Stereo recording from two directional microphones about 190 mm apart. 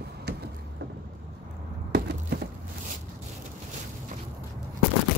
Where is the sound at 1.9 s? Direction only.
60° right (ahead or behind).